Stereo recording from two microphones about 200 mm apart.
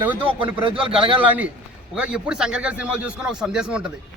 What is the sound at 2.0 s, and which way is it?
A man's voice, 5° right (ahead or behind).